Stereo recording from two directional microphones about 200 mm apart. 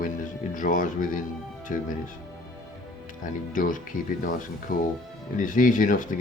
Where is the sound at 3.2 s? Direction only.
40° left (ahead or behind).